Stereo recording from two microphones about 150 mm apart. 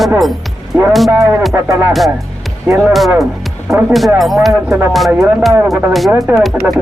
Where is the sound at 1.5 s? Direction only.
15° right (ahead or behind).